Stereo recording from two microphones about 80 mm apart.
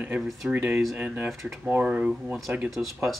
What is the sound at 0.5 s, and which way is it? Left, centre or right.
Speech, centre.